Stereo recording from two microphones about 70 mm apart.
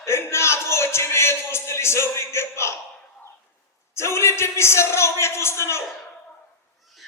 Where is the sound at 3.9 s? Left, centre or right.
Left.